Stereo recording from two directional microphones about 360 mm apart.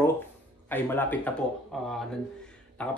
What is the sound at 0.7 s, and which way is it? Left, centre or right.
Speech, centre.